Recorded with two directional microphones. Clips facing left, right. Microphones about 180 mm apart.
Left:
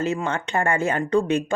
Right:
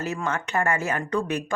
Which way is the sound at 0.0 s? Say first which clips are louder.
Left 4 dB; 25° left (ahead or behind).